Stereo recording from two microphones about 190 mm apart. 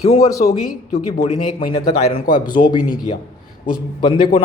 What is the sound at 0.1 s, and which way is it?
A man's voice, 35° left (ahead or behind).